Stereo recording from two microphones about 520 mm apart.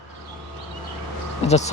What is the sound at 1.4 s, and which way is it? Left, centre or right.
Speech, centre.